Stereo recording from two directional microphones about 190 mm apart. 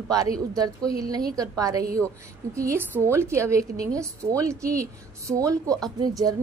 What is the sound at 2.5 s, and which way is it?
A woman's voice, 15° right (ahead or behind).